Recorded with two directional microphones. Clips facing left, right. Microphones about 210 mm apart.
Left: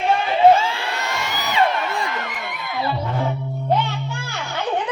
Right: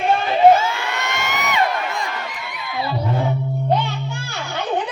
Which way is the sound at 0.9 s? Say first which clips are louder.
Right 1 dB; 30° left (ahead or behind).